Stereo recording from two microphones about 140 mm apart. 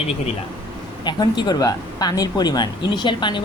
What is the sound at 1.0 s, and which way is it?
Speech, 30° left (ahead or behind).